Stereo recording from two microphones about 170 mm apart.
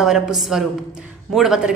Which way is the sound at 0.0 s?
5° right (ahead or behind).